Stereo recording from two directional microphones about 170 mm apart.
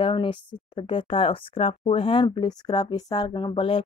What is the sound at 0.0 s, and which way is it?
Speech, 30° left (ahead or behind).